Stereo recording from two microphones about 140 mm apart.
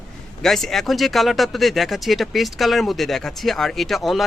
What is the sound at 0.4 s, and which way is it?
Speech, centre (ahead or behind).